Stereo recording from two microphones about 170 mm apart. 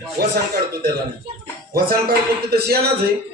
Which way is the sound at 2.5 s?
70° right (ahead or behind).